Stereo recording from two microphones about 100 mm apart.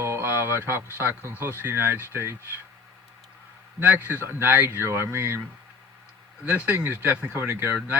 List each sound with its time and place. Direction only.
0.0 s a sound: 25° right (ahead or behind)
0.9 s speech: 20° right (ahead or behind)
3.8 s speech: 20° right (ahead or behind)
6.4 s speech: 15° right (ahead or behind)